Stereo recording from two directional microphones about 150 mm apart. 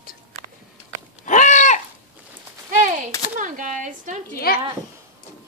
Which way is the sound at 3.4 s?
60° right (ahead or behind).